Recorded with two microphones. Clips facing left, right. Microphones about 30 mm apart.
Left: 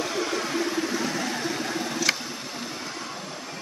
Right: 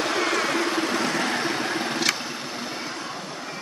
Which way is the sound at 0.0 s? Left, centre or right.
Right.